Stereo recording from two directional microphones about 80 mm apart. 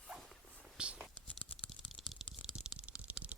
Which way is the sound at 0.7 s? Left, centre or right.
Centre.